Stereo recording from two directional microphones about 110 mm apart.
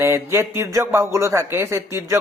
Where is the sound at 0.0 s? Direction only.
25° right (ahead or behind).